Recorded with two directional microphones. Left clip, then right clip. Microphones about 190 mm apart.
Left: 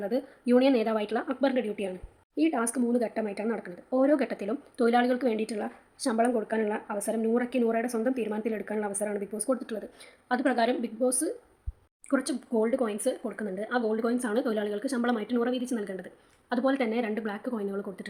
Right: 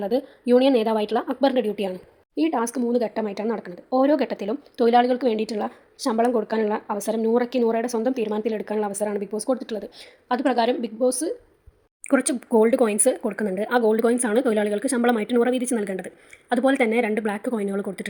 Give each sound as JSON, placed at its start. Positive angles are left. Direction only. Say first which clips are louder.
{"t": 0.0, "sound": "a woman's voice", "louder": "right 6 dB", "side_deg": -15}
{"t": 12.0, "sound": "speech", "louder": "right 7 dB", "side_deg": -35}